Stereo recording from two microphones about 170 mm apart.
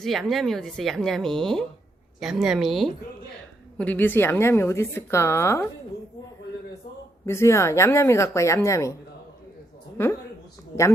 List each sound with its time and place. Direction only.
0.0 s a woman's voice: centre (ahead or behind)
7.3 s a woman's voice: 15° left (ahead or behind)
10.0 s a woman's voice: 15° left (ahead or behind)